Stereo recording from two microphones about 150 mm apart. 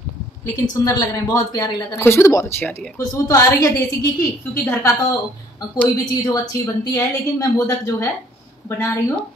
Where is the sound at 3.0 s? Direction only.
20° left (ahead or behind).